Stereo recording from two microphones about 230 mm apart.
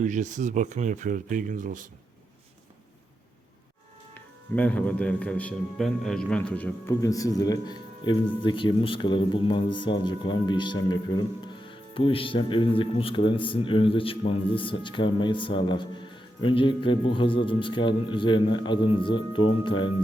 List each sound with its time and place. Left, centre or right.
0.0 s speech: right
4.1 s speech: centre